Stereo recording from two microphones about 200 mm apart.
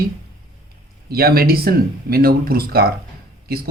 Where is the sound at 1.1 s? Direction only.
50° right (ahead or behind).